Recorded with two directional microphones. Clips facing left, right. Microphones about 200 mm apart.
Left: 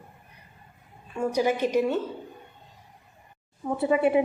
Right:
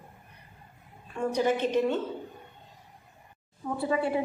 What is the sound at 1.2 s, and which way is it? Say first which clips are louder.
Speech: left 2 dB; 10° left (ahead or behind).